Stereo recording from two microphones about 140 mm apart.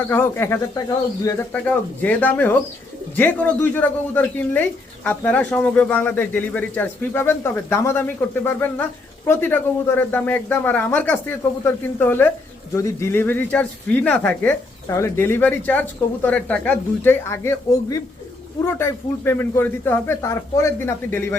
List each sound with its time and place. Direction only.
0.1 s speech: 15° left (ahead or behind)
1.5 s speech: 10° left (ahead or behind)